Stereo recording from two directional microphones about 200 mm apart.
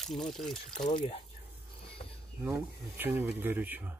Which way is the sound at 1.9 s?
30° left (ahead or behind).